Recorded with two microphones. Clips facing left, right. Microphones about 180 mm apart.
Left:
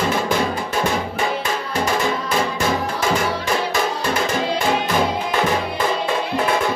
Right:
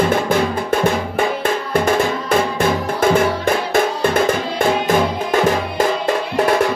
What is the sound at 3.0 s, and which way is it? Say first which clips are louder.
Music: right 5 dB; 55° right (ahead or behind).